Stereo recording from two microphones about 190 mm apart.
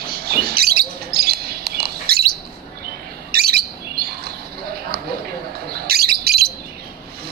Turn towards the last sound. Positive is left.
turn(degrees=-55)  # may be behind; listen again after turning